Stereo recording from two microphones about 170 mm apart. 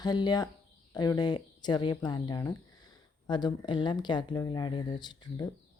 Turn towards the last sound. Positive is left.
turn(degrees=25)  # may be behind; listen again after turning